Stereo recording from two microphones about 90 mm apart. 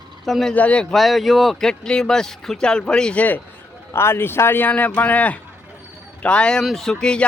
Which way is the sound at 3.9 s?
30° left (ahead or behind).